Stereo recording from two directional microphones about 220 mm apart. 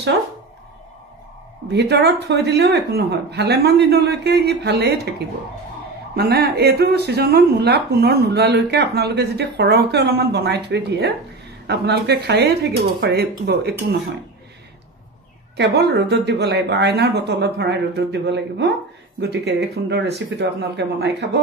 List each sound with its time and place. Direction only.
1.7 s speech: 45° right (ahead or behind)
6.1 s speech: 45° right (ahead or behind)
15.5 s speech: 50° right (ahead or behind)